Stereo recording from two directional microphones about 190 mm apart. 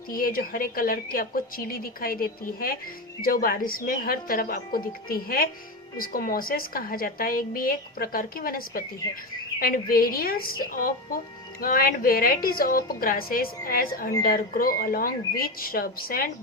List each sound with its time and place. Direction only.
0.1 s a woman's voice: 50° left (ahead or behind)